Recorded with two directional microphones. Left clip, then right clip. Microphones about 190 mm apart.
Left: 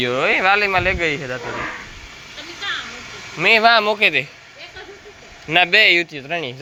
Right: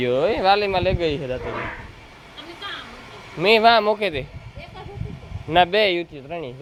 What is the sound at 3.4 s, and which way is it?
Speech, 30° right (ahead or behind).